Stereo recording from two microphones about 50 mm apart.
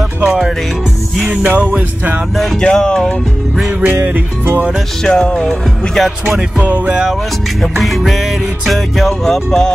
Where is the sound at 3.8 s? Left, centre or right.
Right.